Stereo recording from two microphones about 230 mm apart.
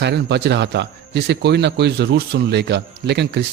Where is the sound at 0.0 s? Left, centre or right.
Right.